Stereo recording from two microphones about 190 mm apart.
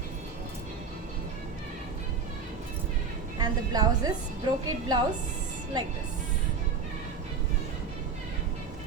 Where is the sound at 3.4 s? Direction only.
20° right (ahead or behind).